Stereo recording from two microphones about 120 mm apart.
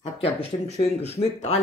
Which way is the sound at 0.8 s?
60° left (ahead or behind).